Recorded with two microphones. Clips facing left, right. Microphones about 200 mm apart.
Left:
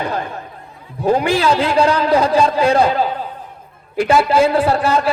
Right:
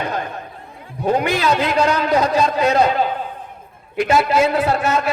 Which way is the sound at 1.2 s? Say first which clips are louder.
Left 3 dB; 30° left (ahead or behind).